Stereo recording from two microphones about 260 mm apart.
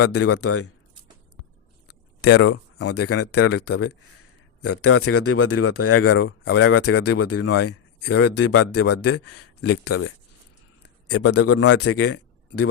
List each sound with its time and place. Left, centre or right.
0.0 s speech: left
1.9 s a sound: left
2.5 s speech: left
2.9 s speech: left
11.1 s speech: left